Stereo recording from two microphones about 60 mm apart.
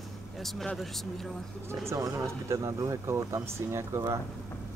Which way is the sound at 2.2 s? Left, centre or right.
Right.